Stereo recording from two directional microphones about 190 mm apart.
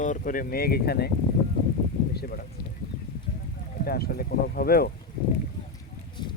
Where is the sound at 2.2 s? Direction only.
55° left (ahead or behind).